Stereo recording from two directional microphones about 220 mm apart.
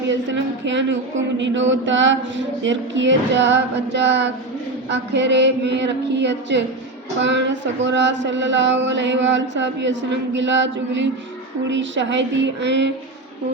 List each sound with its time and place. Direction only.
0.1 s a woman's voice: 55° right (ahead or behind)